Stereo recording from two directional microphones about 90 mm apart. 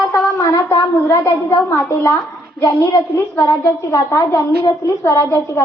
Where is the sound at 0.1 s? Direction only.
40° left (ahead or behind).